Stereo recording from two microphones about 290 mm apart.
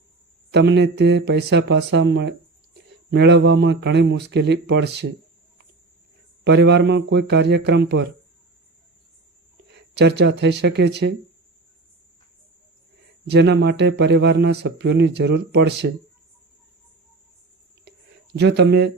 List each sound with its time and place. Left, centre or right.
0.5 s speech: right
6.4 s speech: right
9.6 s speech: right
13.3 s speech: right
18.3 s speech: right